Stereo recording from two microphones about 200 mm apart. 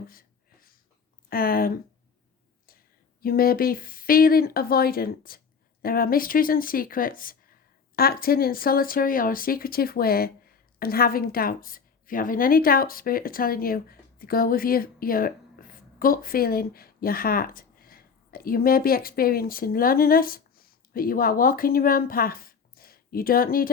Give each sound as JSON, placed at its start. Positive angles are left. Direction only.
{"t": 0.1, "sound": "a sound", "side_deg": 45}
{"t": 1.3, "sound": "speech", "side_deg": 45}
{"t": 3.2, "sound": "speech", "side_deg": 45}